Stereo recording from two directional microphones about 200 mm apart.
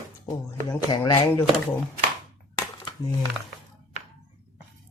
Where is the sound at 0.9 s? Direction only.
20° left (ahead or behind).